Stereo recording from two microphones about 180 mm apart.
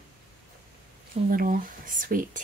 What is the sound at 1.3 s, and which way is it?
Speech, 50° right (ahead or behind).